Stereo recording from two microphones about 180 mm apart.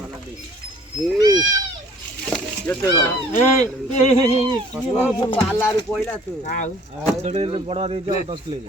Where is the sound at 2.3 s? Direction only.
10° left (ahead or behind).